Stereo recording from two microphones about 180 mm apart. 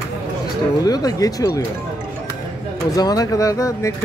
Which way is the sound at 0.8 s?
20° left (ahead or behind).